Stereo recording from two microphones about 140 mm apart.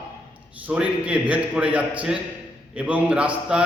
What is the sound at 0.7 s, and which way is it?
A man's voice, 10° right (ahead or behind).